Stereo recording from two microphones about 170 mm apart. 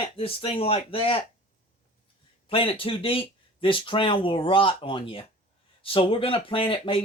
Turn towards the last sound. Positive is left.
turn(degrees=30)  # may be behind; listen again after turning